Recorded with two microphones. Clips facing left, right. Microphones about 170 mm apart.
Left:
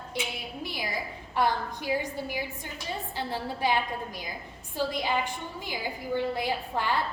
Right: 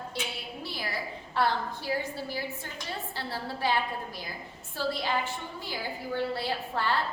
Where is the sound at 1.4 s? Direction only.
15° left (ahead or behind).